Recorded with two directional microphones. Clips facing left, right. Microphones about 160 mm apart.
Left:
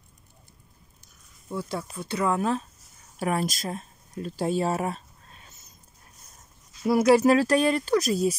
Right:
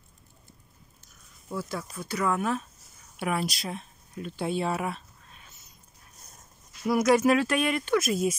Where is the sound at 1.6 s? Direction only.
25° left (ahead or behind).